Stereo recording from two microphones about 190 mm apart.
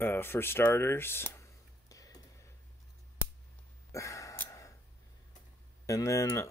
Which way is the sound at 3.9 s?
15° left (ahead or behind).